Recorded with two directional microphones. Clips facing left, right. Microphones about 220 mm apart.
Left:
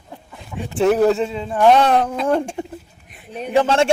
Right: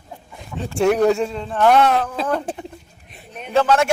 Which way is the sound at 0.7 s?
5° left (ahead or behind).